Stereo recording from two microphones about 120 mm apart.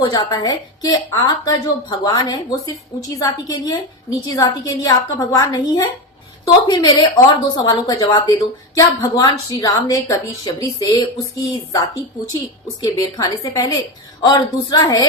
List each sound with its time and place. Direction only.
0.0 s a woman's voice: 35° left (ahead or behind)